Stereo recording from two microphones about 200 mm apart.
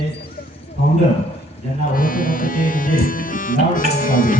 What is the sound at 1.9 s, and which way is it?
Music, 45° left (ahead or behind).